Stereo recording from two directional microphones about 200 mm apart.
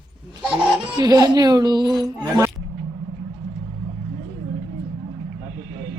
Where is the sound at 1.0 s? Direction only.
20° right (ahead or behind).